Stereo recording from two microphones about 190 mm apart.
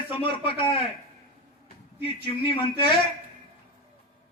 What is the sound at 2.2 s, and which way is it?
Speech, 25° left (ahead or behind).